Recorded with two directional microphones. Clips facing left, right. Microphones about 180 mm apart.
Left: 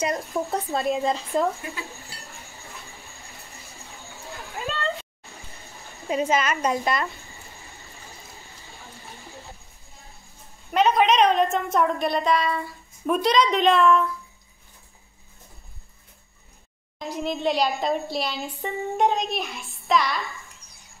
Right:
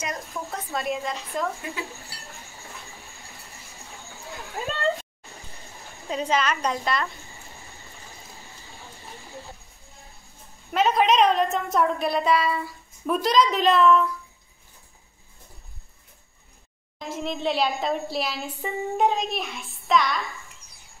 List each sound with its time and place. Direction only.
0.0 s speech: 30° left (ahead or behind)
6.0 s a woman's voice: 5° left (ahead or behind)
10.7 s a woman's voice: centre (ahead or behind)
17.1 s a woman's voice: centre (ahead or behind)